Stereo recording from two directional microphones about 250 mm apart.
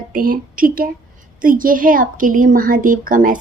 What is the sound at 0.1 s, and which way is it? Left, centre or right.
A woman's voice, right.